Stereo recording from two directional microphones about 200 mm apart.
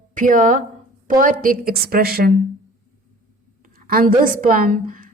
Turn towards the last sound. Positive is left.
turn(degrees=-40)  # may be behind; listen again after turning